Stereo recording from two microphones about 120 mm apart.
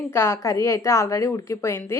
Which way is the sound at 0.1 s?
20° left (ahead or behind).